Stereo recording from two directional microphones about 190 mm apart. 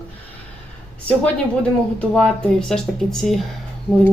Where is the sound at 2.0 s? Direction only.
Centre (ahead or behind).